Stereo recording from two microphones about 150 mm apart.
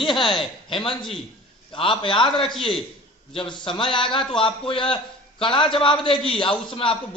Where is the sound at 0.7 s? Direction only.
35° left (ahead or behind).